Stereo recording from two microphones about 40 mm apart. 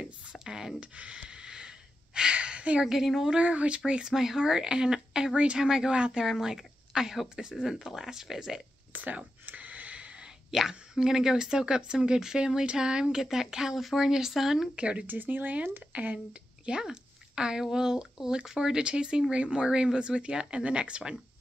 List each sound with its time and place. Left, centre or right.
0.3 s a sound: centre
0.7 s snort: right
2.3 s a sound: right
2.8 s speech: centre
3.3 s speech: right
4.1 s speech: centre
6.2 s speech: centre
8.9 s a sound: right
9.9 s a sound: right
10.5 s speech: centre
14.8 s speech: right
15.0 s speech: right
16.6 s speech: centre